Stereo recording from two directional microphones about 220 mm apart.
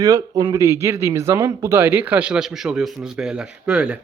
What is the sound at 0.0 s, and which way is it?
A man's voice, 15° right (ahead or behind).